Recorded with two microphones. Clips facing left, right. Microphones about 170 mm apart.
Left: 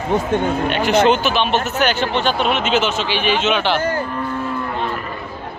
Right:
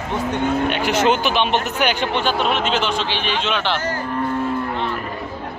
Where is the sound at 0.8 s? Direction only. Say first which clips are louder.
Left 6 dB; 10° right (ahead or behind).